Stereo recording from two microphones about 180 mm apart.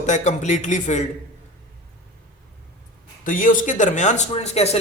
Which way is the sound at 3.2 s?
50° left (ahead or behind).